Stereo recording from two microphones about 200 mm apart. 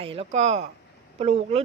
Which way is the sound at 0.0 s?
30° right (ahead or behind).